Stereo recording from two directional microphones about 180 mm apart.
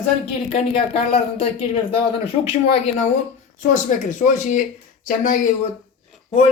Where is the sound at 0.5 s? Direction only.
35° left (ahead or behind).